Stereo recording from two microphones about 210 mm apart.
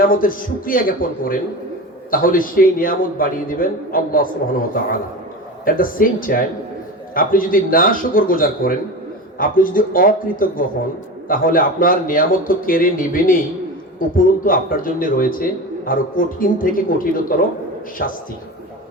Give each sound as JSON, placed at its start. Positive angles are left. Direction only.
{"t": 0.0, "sound": "a man's voice", "side_deg": 40}